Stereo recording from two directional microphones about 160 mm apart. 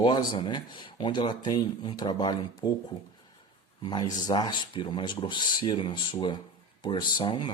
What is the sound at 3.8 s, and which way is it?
Speech, 25° left (ahead or behind).